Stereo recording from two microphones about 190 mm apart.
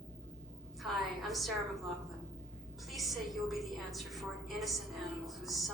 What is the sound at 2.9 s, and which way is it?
A woman's voice, centre (ahead or behind).